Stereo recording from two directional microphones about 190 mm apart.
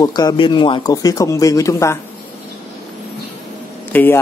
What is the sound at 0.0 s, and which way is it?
Speech, 20° left (ahead or behind).